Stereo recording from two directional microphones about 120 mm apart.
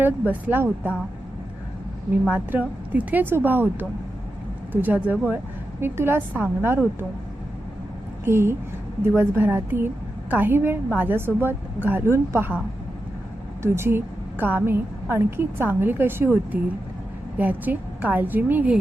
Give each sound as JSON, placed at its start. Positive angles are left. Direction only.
{"t": 0.0, "sound": "a woman's voice", "side_deg": -15}
{"t": 2.3, "sound": "a woman's voice", "side_deg": -10}
{"t": 8.2, "sound": "a woman's voice", "side_deg": -20}
{"t": 13.6, "sound": "a woman's voice", "side_deg": -20}